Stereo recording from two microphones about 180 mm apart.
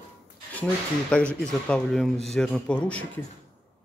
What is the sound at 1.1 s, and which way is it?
Speech, 5° left (ahead or behind).